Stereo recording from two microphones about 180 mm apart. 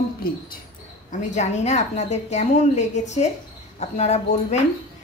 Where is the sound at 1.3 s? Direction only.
40° left (ahead or behind).